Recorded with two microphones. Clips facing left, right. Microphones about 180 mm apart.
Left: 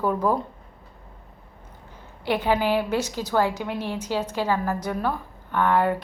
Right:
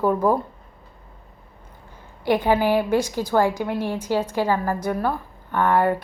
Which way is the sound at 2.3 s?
15° right (ahead or behind).